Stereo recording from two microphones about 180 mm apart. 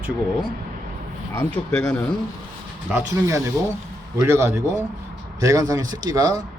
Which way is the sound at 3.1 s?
20° right (ahead or behind).